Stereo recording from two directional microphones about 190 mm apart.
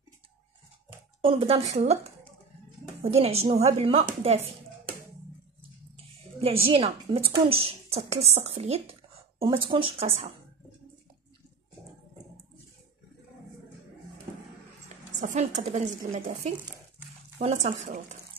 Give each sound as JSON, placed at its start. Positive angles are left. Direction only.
{"t": 1.7, "sound": "a woman's voice", "side_deg": -35}
{"t": 3.1, "sound": "a woman's voice", "side_deg": -30}
{"t": 6.4, "sound": "a woman's voice", "side_deg": -30}
{"t": 15.1, "sound": "a woman's voice", "side_deg": -40}